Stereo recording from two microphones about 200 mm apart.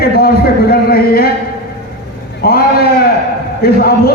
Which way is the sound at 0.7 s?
50° left (ahead or behind).